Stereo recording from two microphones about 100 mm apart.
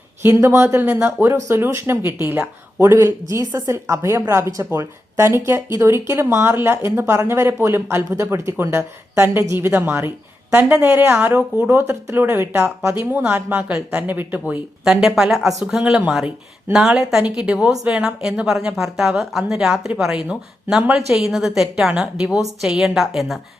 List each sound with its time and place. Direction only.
0.3 s a woman's voice: 25° right (ahead or behind)
14.8 s a woman's voice: 5° right (ahead or behind)